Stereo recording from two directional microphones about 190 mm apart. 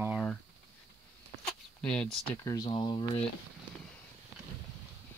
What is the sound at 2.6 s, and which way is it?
Speech, 25° left (ahead or behind).